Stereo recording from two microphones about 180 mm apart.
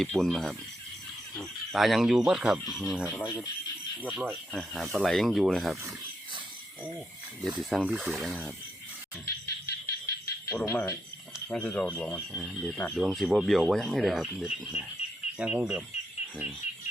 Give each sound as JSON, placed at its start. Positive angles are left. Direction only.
{"t": 0.0, "sound": "speech", "side_deg": 0}
{"t": 3.2, "sound": "speech", "side_deg": 15}
{"t": 4.0, "sound": "speech", "side_deg": -5}
{"t": 7.6, "sound": "speech", "side_deg": 0}
{"t": 9.2, "sound": "bird", "side_deg": 60}
{"t": 10.5, "sound": "speech", "side_deg": 10}
{"t": 12.3, "sound": "speech", "side_deg": -10}